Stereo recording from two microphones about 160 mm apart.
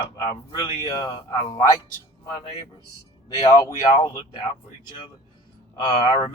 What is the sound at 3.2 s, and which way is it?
Speech, 25° left (ahead or behind).